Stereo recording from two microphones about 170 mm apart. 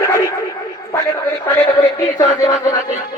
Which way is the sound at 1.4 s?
15° left (ahead or behind).